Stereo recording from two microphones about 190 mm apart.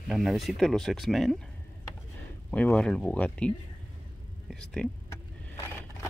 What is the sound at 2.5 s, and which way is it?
Speech, 5° left (ahead or behind).